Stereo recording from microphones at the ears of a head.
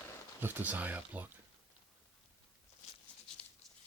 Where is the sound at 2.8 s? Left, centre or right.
Left.